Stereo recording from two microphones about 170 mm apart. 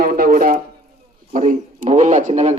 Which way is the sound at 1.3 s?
45° right (ahead or behind).